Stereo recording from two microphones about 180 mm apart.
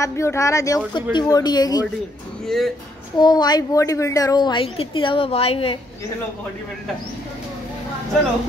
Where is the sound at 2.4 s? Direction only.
Centre (ahead or behind).